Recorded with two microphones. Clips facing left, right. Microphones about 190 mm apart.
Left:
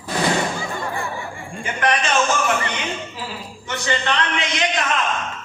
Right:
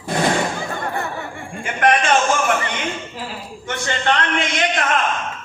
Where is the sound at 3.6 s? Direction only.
50° right (ahead or behind).